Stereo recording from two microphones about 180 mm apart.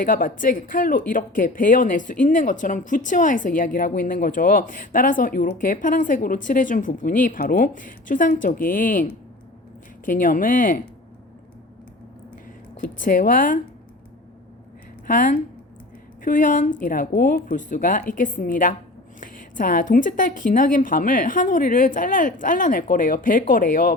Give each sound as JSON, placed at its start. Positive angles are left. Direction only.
{"t": 0.0, "sound": "speech", "side_deg": 50}
{"t": 12.8, "sound": "speech", "side_deg": 50}
{"t": 15.0, "sound": "a woman's voice", "side_deg": 50}